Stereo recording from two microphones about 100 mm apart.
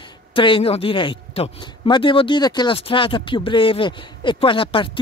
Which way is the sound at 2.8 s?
65° left (ahead or behind).